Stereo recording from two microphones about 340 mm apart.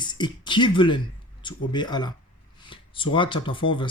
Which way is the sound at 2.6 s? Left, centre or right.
Centre.